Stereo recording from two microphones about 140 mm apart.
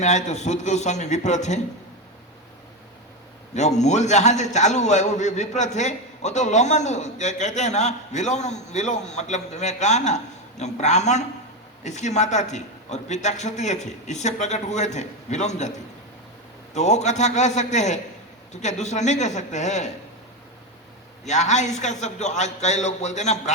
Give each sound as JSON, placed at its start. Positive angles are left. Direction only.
{"t": 0.0, "sound": "a man's voice", "side_deg": 55}
{"t": 3.5, "sound": "a man's voice", "side_deg": 55}
{"t": 16.7, "sound": "a man's voice", "side_deg": 55}
{"t": 21.2, "sound": "a man's voice", "side_deg": 55}